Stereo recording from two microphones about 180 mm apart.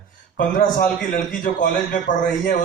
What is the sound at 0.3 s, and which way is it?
A man's voice, 50° left (ahead or behind).